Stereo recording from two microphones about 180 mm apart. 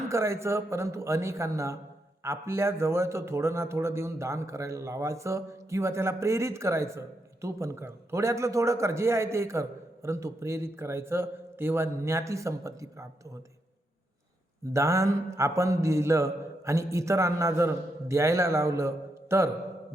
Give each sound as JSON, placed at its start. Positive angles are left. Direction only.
{"t": 0.1, "sound": "a man's voice", "side_deg": -15}
{"t": 14.7, "sound": "a man's voice", "side_deg": -15}